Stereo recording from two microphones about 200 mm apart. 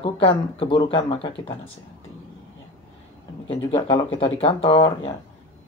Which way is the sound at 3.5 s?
25° left (ahead or behind).